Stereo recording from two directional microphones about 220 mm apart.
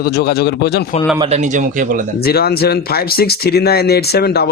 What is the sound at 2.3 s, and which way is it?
A man's voice, 45° left (ahead or behind).